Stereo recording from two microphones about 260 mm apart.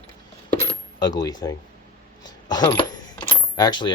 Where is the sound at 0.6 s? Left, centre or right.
Centre.